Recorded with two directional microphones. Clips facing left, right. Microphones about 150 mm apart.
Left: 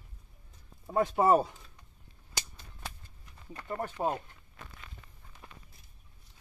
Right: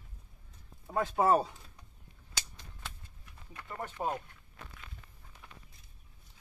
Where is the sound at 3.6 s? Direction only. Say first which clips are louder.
Left 5 dB; 30° left (ahead or behind).